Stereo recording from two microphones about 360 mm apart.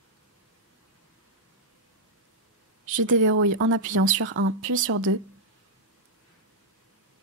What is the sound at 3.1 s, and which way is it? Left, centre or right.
Speech, right.